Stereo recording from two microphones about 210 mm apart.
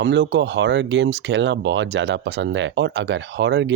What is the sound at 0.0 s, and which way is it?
Speech, 55° right (ahead or behind).